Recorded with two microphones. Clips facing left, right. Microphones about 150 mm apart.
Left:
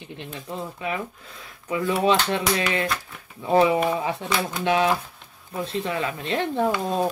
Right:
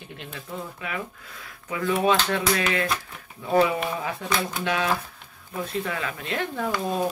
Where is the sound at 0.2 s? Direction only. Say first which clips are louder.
Left 3 dB; 20° left (ahead or behind).